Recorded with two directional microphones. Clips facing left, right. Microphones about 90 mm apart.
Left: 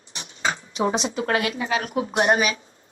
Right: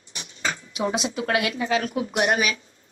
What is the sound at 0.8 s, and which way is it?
Speech, 35° left (ahead or behind).